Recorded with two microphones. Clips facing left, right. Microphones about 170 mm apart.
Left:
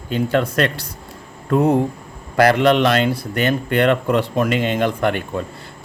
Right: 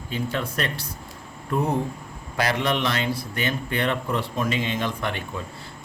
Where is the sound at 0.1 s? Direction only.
65° left (ahead or behind).